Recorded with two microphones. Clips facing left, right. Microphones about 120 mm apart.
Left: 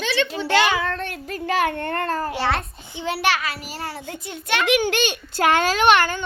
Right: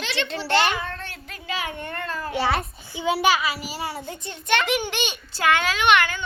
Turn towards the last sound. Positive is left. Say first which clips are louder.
# left 3 dB
turn(degrees=35)  # may be behind; listen again after turning